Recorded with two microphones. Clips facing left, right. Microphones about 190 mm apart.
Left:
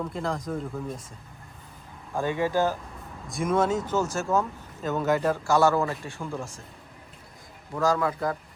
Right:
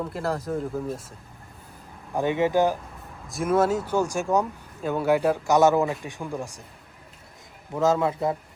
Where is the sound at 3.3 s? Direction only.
5° right (ahead or behind).